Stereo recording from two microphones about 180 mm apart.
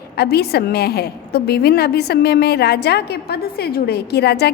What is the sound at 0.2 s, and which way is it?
A woman's voice, 60° left (ahead or behind).